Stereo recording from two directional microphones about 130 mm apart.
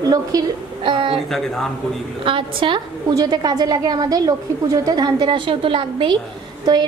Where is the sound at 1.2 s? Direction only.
5° left (ahead or behind).